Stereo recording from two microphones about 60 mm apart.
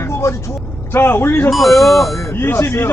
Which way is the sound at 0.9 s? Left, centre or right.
Left.